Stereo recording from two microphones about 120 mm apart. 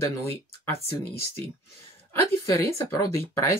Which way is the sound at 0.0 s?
20° left (ahead or behind).